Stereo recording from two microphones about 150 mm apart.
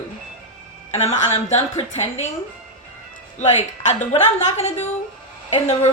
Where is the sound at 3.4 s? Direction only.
50° left (ahead or behind).